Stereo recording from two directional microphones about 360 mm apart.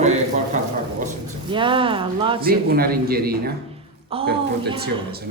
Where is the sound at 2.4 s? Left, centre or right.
Right.